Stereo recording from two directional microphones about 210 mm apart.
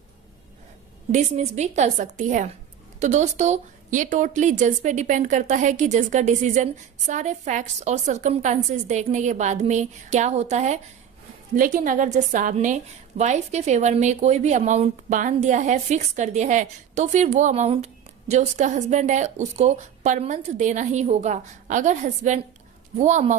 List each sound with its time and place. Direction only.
1.1 s a woman's voice: 35° right (ahead or behind)